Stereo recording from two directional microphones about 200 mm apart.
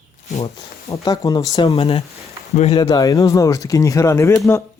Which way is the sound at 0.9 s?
15° left (ahead or behind).